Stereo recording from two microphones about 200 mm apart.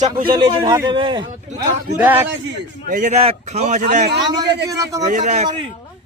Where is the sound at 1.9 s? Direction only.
10° right (ahead or behind).